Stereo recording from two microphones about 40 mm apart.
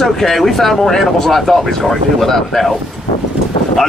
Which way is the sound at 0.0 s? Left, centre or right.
Centre.